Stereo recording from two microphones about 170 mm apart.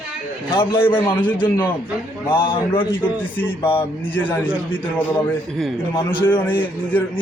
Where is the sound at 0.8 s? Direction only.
10° left (ahead or behind).